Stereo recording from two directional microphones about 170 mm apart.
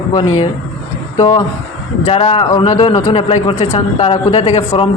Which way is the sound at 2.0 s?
35° left (ahead or behind).